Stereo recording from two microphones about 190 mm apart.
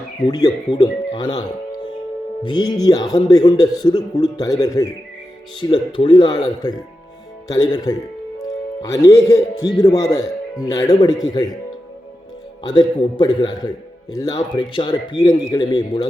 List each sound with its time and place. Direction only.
0.2 s a man's voice: 20° left (ahead or behind)
12.6 s a man's voice: 25° left (ahead or behind)